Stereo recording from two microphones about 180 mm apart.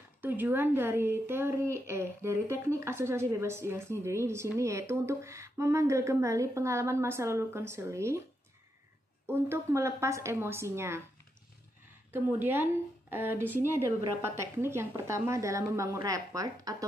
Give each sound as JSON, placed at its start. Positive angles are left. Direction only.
{"t": 0.2, "sound": "a woman's voice", "side_deg": -10}
{"t": 9.2, "sound": "a woman's voice", "side_deg": -10}
{"t": 12.1, "sound": "a woman's voice", "side_deg": -10}